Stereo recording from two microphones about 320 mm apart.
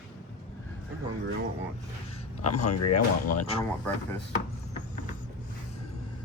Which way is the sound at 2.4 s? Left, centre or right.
Left.